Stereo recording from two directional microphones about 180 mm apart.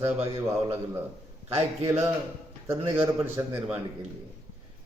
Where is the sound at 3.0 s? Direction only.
15° right (ahead or behind).